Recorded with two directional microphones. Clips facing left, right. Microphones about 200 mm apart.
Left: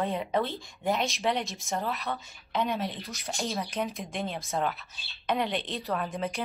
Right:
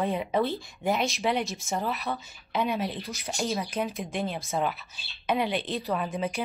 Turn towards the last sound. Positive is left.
turn(degrees=-5)  # may be behind; listen again after turning